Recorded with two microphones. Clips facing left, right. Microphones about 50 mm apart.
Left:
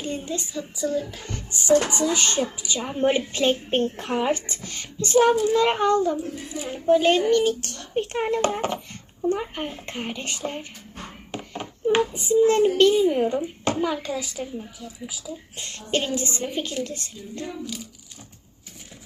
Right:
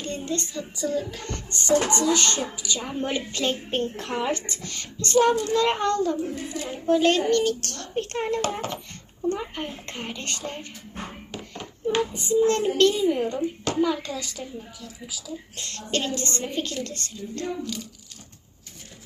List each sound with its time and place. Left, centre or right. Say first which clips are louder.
0.0 s a woman's voice: even; centre
11.3 s a sound: left 3 dB; centre
12.1 s a woman's voice: left 2 dB; centre